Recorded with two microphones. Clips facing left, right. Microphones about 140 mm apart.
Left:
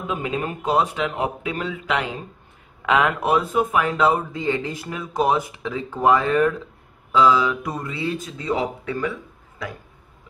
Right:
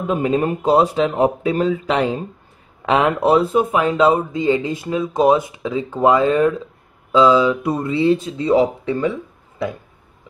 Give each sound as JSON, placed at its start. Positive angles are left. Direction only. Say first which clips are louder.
{"t": 0.0, "sound": "speech", "louder": "right 8 dB", "side_deg": -40}